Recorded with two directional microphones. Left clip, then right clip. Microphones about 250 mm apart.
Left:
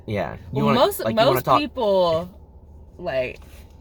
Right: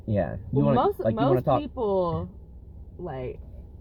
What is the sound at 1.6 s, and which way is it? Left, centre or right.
Speech, centre.